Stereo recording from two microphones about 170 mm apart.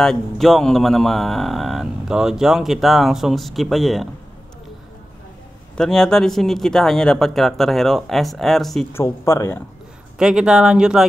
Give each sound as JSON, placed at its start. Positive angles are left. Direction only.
{"t": 0.0, "sound": "speech", "side_deg": 0}
{"t": 5.8, "sound": "speech", "side_deg": 5}
{"t": 8.9, "sound": "speech", "side_deg": 15}
{"t": 10.1, "sound": "speech", "side_deg": -5}